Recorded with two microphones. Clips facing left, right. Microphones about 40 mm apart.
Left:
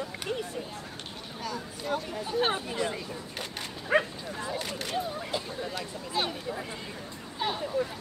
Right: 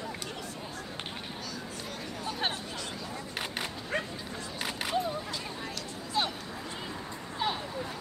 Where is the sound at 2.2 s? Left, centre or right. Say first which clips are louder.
Left 5 dB; centre.